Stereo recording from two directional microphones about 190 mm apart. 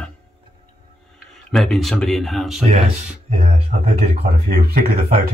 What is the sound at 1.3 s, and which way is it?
Speech, centre (ahead or behind).